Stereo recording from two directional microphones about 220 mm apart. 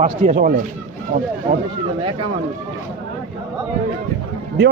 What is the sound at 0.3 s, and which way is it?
Speech, 40° right (ahead or behind).